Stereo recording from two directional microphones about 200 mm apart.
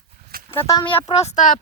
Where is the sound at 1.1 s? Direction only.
35° left (ahead or behind).